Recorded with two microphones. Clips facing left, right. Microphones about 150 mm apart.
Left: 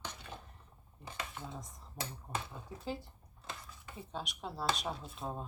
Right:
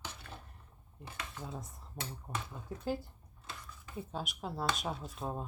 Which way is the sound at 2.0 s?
Centre (ahead or behind).